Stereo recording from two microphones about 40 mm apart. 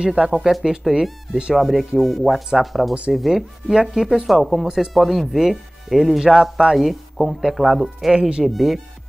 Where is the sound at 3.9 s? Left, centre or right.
Centre.